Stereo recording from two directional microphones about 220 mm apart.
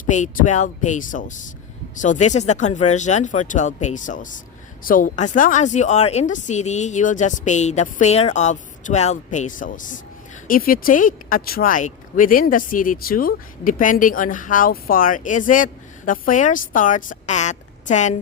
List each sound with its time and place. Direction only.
0.0 s a woman's voice: 35° left (ahead or behind)